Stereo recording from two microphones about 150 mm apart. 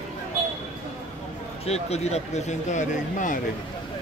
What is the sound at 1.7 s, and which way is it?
Speech, 45° left (ahead or behind).